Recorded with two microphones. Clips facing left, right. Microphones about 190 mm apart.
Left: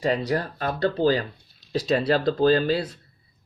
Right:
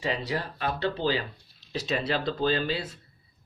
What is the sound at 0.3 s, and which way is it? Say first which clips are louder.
Speech: left 5 dB; 45° left (ahead or behind).